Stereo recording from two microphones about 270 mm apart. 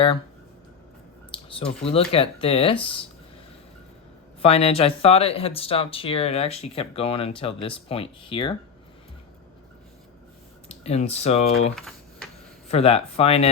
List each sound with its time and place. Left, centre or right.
1.3 s speech: centre
4.4 s speech: left
10.7 s speech: left
11.8 s typing: centre
12.6 s speech: left